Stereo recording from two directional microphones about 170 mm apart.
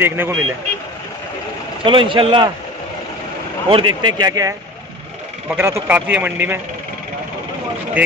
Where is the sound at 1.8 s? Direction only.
30° right (ahead or behind).